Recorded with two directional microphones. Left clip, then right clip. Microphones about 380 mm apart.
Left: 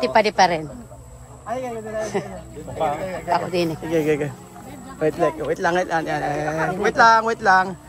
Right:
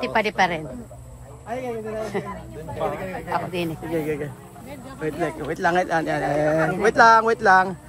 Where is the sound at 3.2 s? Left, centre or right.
Centre.